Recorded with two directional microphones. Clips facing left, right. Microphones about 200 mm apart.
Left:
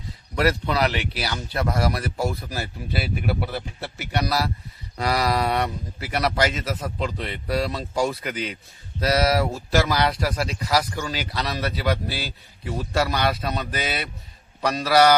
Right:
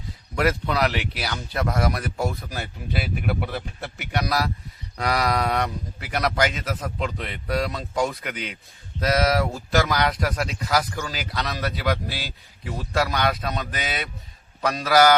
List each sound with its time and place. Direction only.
0.3 s speech: centre (ahead or behind)